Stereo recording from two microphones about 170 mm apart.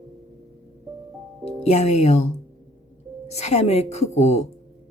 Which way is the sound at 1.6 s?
40° left (ahead or behind).